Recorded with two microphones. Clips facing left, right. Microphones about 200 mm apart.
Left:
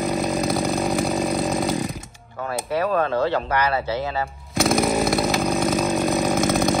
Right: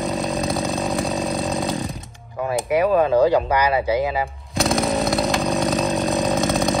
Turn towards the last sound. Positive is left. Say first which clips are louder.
# even
turn(degrees=0)  # may be behind; listen again after turning